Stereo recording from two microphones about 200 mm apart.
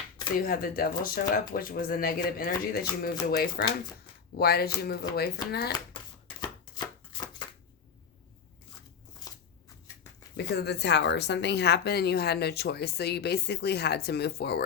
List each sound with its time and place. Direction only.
0.3 s speech: 45° left (ahead or behind)
6.7 s chopping: 20° left (ahead or behind)
10.3 s a woman's voice: 55° left (ahead or behind)